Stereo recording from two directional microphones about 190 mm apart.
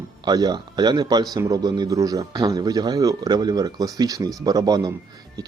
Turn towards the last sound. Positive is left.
turn(degrees=-20)  # may be behind; listen again after turning